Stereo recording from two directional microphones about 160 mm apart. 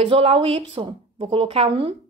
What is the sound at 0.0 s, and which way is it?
A woman's voice, 35° right (ahead or behind).